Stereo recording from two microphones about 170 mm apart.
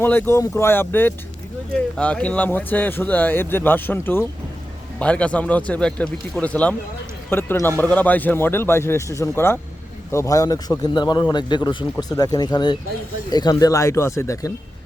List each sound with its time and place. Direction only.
0.0 s a man's voice: 10° left (ahead or behind)